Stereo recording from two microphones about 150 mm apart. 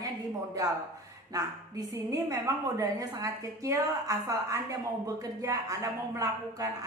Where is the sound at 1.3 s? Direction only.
20° right (ahead or behind).